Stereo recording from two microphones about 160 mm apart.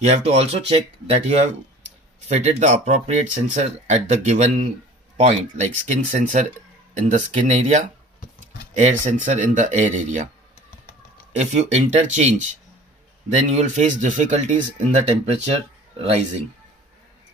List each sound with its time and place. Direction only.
0.0 s speech: 40° right (ahead or behind)
11.3 s speech: 45° right (ahead or behind)
13.4 s speech: 45° right (ahead or behind)